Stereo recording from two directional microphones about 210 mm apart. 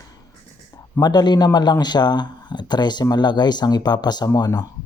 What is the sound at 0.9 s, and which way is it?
Speech, 20° left (ahead or behind).